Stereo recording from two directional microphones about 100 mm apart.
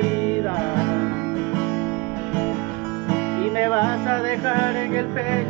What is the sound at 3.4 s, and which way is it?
Music, 20° left (ahead or behind).